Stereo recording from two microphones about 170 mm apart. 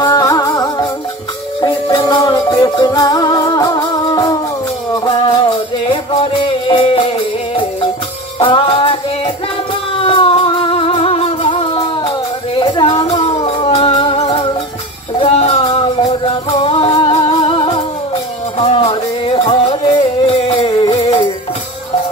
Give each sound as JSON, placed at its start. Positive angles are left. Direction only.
{"t": 0.0, "sound": "music", "side_deg": 20}
{"t": 8.4, "sound": "music", "side_deg": 30}
{"t": 12.5, "sound": "a sound", "side_deg": 25}
{"t": 13.4, "sound": "music", "side_deg": 35}